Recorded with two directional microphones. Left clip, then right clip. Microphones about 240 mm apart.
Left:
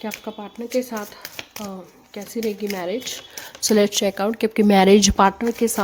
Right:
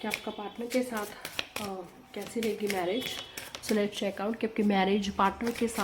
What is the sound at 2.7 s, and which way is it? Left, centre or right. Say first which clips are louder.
A woman's voice: left 5 dB; left.